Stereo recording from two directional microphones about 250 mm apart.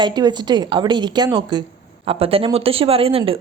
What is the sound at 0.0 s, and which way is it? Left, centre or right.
A woman's voice, centre.